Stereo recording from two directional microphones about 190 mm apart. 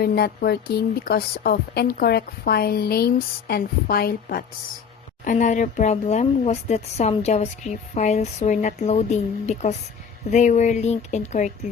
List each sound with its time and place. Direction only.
0.0 s speech: 55° left (ahead or behind); by 11.5 s 40° left (ahead or behind)